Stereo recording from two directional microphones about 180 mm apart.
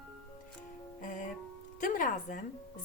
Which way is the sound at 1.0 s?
45° left (ahead or behind).